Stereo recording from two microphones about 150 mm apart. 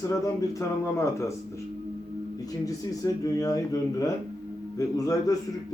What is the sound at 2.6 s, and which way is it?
Speech, 25° left (ahead or behind).